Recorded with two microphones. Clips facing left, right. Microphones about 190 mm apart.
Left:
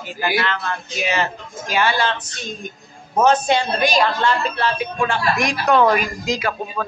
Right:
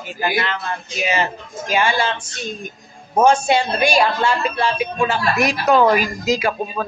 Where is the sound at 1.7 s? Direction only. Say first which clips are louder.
Right 1 dB; 10° right (ahead or behind).